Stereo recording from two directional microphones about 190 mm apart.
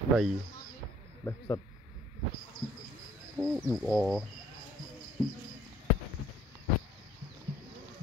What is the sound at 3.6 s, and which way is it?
Speech, 5° left (ahead or behind).